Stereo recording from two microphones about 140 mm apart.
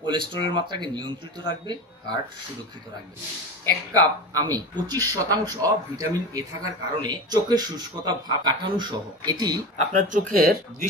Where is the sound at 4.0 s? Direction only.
30° right (ahead or behind).